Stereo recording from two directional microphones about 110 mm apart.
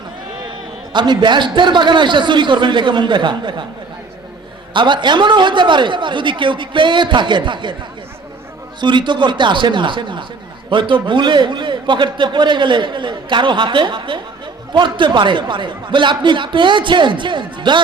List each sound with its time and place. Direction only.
0.9 s a man's voice: 45° right (ahead or behind)
4.7 s a man's voice: 45° right (ahead or behind)
8.8 s a man's voice: 45° right (ahead or behind)